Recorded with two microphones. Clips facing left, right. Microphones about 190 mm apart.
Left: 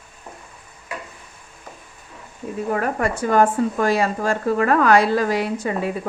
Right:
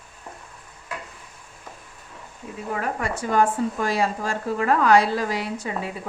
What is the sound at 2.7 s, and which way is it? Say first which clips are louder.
Speech: left 5 dB; 50° left (ahead or behind).